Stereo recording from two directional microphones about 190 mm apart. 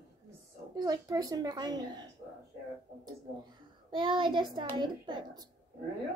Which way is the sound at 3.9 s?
25° right (ahead or behind).